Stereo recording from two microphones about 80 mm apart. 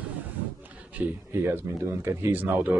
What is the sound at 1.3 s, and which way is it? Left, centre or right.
Speech, right.